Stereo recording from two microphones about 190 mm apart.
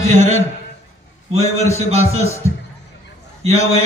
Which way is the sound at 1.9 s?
35° right (ahead or behind).